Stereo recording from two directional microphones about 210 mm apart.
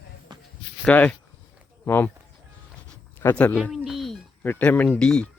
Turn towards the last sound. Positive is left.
turn(degrees=5)  # may be behind; listen again after turning